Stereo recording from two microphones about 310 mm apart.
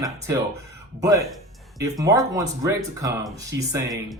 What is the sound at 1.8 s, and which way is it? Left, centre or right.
Speech, centre.